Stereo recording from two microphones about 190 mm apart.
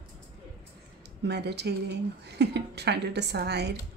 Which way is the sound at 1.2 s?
60° right (ahead or behind).